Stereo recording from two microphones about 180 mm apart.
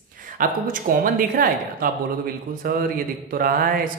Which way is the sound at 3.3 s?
55° right (ahead or behind).